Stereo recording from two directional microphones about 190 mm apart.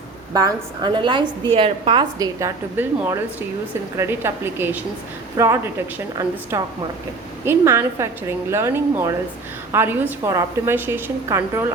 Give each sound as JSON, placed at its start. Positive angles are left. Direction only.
{"t": 0.3, "sound": "a woman's voice", "side_deg": -20}
{"t": 6.5, "sound": "a woman's voice", "side_deg": -15}